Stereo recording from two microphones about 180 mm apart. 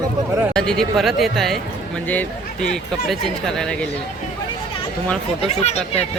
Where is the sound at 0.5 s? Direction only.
5° left (ahead or behind).